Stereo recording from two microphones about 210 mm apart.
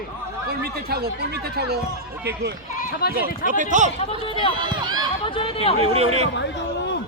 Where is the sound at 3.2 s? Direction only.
40° right (ahead or behind).